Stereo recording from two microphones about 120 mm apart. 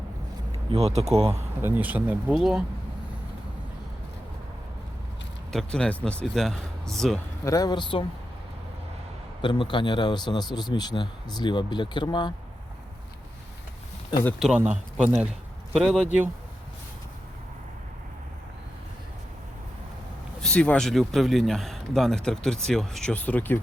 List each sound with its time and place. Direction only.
0.5 s speech: 60° right (ahead or behind)
1.3 s speech: 15° right (ahead or behind)
5.5 s a man's voice: 5° left (ahead or behind)
7.4 s speech: 30° left (ahead or behind)
9.4 s speech: 40° left (ahead or behind)
14.3 s a man's voice: 5° right (ahead or behind)
20.4 s a man's voice: 10° left (ahead or behind)